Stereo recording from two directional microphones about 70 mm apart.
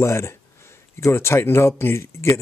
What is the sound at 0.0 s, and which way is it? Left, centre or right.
Speech, left.